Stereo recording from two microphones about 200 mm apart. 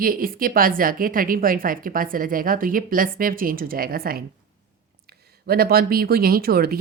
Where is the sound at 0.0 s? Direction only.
45° right (ahead or behind).